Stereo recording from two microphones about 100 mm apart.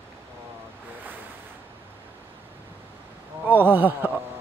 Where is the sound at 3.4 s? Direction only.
20° right (ahead or behind).